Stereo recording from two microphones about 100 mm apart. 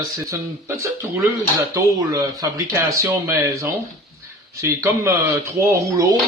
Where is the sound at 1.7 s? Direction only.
35° right (ahead or behind).